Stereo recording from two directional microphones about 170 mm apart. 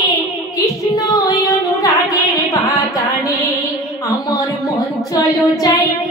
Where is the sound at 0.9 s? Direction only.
20° left (ahead or behind).